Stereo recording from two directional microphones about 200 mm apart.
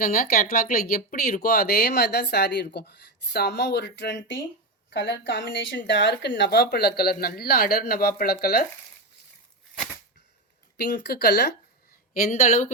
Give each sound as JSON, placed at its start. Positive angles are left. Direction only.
{"t": 0.0, "sound": "speech", "side_deg": 45}
{"t": 10.8, "sound": "speech", "side_deg": 55}